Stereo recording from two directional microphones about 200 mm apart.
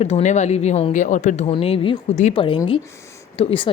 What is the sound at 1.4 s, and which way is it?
Speech, 25° left (ahead or behind).